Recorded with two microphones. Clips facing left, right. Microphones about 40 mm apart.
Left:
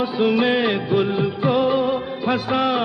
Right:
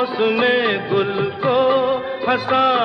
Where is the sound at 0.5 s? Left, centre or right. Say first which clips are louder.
Right 2 dB; centre.